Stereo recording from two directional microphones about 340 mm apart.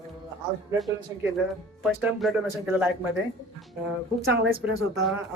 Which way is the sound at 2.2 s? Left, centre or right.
Centre.